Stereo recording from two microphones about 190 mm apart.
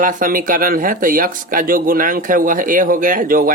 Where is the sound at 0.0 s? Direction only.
45° right (ahead or behind).